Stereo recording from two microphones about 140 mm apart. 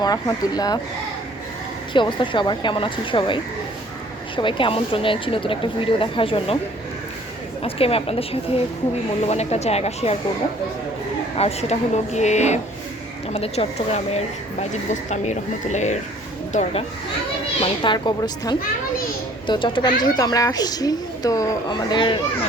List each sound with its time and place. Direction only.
0.0 s speech: 30° left (ahead or behind)
1.9 s speech: 35° left (ahead or behind)
7.6 s speech: 45° left (ahead or behind)
11.3 s speech: 50° left (ahead or behind)
17.6 s speech: 35° left (ahead or behind)